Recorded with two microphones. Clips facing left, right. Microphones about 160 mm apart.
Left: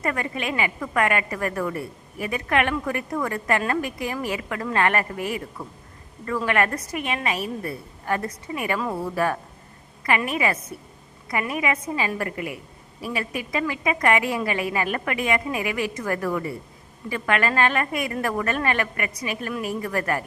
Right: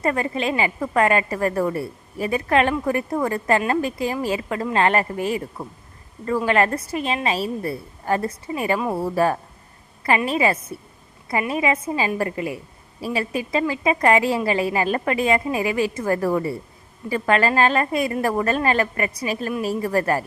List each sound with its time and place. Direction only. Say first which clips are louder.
0.0 s a woman's voice: right 5 dB; 30° right (ahead or behind)